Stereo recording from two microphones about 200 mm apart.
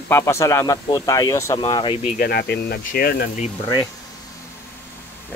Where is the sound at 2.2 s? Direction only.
50° left (ahead or behind).